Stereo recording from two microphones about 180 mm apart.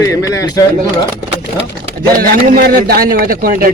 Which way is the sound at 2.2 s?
55° right (ahead or behind).